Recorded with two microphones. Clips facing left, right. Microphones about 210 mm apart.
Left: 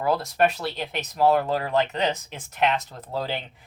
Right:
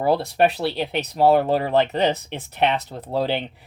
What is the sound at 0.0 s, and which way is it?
Speech, 35° right (ahead or behind).